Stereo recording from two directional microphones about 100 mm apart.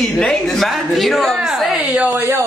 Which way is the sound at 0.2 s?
5° left (ahead or behind).